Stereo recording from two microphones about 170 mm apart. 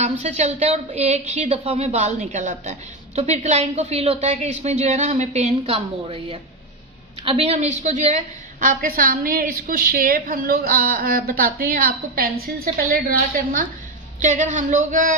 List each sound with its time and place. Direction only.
0.0 s a woman's voice: 40° right (ahead or behind)
8.6 s a woman's voice: 55° right (ahead or behind)